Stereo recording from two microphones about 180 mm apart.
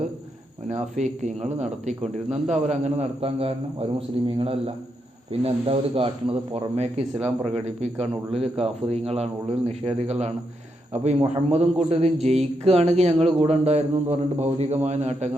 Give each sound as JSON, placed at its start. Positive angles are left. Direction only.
{"t": 0.7, "sound": "speech", "side_deg": -40}